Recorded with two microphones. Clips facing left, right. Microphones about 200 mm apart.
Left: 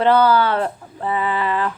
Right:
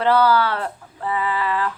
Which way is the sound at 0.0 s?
25° left (ahead or behind).